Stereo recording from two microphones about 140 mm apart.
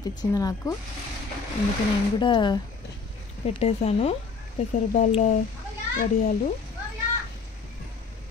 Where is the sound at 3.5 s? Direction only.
50° left (ahead or behind).